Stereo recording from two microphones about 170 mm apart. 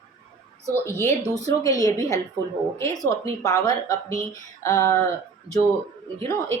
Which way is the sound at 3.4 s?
20° left (ahead or behind).